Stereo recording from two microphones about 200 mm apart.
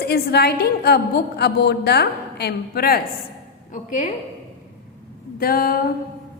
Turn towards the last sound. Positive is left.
turn(degrees=50)  # may be behind; listen again after turning